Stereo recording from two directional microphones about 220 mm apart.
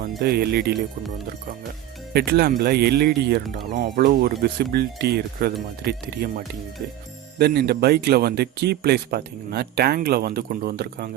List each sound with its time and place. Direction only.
0.2 s speech: 45° right (ahead or behind)
2.1 s speech: 45° right (ahead or behind)